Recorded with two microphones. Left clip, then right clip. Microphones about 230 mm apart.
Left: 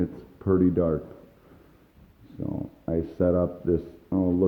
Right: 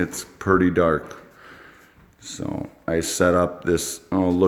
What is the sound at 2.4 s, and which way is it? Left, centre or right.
Speech, right.